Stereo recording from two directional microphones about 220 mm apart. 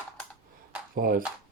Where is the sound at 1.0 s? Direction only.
40° right (ahead or behind).